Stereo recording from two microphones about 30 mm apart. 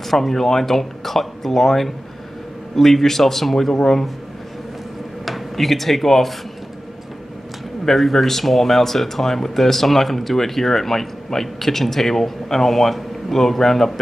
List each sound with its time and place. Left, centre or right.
0.0 s speech: centre
5.2 s speech: centre
7.8 s speech: centre